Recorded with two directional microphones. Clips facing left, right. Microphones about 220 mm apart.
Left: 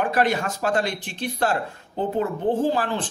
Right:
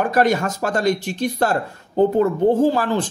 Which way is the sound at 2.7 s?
45° right (ahead or behind).